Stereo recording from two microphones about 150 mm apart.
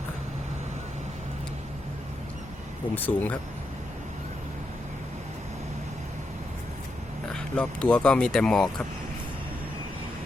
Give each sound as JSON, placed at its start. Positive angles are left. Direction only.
{"t": 2.9, "sound": "speech", "side_deg": 10}
{"t": 7.3, "sound": "speech", "side_deg": 5}